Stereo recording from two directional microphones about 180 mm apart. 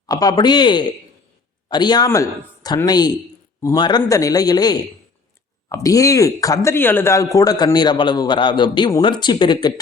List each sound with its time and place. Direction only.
0.1 s speech: 20° left (ahead or behind)